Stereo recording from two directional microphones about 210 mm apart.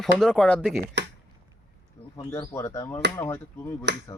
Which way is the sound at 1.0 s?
55° right (ahead or behind).